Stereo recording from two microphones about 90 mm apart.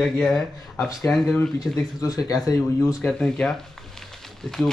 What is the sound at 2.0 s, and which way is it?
Speech, 40° left (ahead or behind).